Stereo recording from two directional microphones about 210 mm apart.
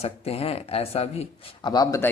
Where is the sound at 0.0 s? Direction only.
30° left (ahead or behind).